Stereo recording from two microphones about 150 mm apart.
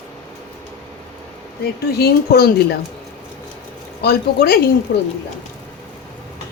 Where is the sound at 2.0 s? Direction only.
90° left.